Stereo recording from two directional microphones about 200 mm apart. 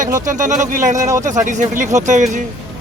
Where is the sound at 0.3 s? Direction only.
40° right (ahead or behind).